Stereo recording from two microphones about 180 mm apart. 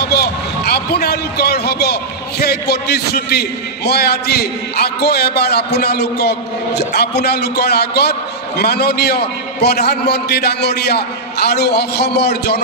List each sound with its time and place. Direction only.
0.0 s a man's voice: 65° left (ahead or behind)